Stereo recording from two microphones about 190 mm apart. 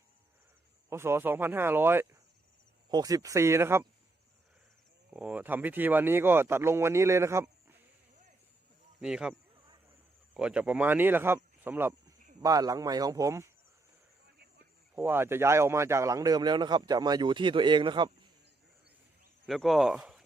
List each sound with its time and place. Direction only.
0.9 s speech: 15° right (ahead or behind)
5.1 s speech: 10° right (ahead or behind)
9.0 s speech: 5° right (ahead or behind)
10.3 s a man's voice: 5° right (ahead or behind)
14.9 s a man's voice: 10° right (ahead or behind)
19.5 s speech: centre (ahead or behind)